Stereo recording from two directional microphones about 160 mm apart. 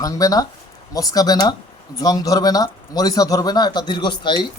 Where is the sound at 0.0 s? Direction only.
20° left (ahead or behind).